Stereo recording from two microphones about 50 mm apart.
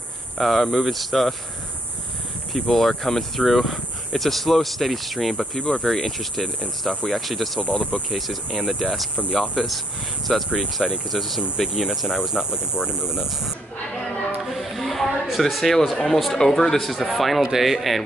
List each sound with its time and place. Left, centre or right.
0.4 s speech: centre
2.7 s speech: centre
7.6 s speech: left
8.1 s speech: centre
14.4 s a sound: centre
15.0 s a sound: centre
15.4 s speech: centre